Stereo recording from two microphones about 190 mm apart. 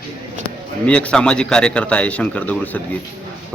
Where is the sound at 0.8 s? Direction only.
5° left (ahead or behind).